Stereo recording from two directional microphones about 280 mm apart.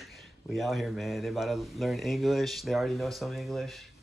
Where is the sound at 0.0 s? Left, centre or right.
Centre.